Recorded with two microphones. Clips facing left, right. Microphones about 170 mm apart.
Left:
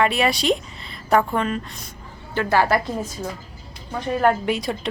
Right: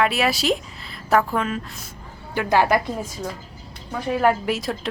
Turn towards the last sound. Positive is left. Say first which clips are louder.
# left 1 dB
turn(degrees=0)  # may be behind; listen again after turning